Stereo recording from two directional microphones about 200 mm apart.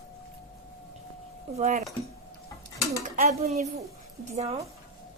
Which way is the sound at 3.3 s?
35° right (ahead or behind).